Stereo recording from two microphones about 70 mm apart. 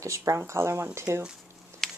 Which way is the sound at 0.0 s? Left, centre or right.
Right.